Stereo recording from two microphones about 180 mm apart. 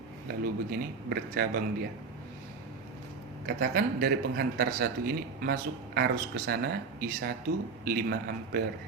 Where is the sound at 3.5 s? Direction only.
55° right (ahead or behind).